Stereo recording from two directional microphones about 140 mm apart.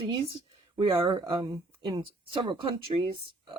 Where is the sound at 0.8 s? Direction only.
35° right (ahead or behind).